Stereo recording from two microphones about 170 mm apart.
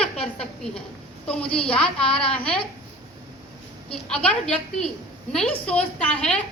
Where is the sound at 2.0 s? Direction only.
35° left (ahead or behind).